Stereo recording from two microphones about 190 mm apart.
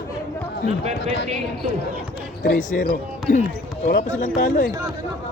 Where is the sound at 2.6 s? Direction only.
45° left (ahead or behind).